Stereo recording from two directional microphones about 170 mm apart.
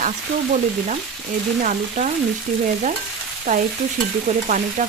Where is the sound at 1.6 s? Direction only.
45° right (ahead or behind).